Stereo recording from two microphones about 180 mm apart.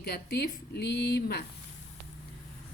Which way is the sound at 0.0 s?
60° left (ahead or behind).